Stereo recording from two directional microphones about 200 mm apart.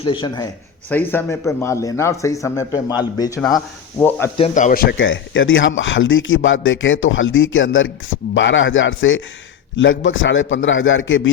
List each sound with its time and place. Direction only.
0.0 s speech: 25° left (ahead or behind)
0.9 s speech: 10° left (ahead or behind)
4.4 s speech: 35° left (ahead or behind)
4.9 s speech: 70° left (ahead or behind)